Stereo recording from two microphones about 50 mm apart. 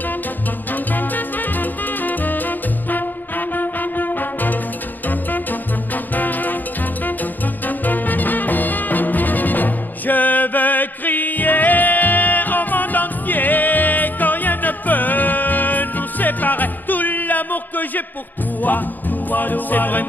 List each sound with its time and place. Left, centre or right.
0.9 s music: left
7.6 s music: left